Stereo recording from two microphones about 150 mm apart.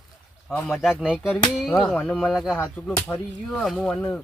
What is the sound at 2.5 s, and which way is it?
Speech, 10° left (ahead or behind).